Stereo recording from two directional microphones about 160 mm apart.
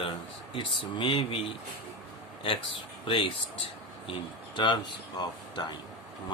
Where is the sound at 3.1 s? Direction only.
35° left (ahead or behind).